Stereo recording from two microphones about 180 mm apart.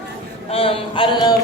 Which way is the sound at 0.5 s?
30° left (ahead or behind).